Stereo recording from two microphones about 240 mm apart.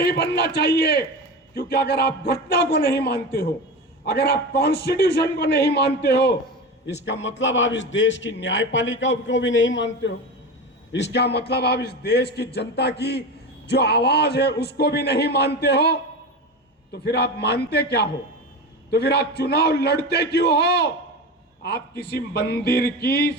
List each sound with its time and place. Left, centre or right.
0.0 s a man's voice: left
18.9 s a man's voice: left